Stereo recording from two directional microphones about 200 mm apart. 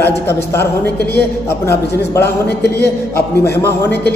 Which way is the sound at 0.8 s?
55° left (ahead or behind).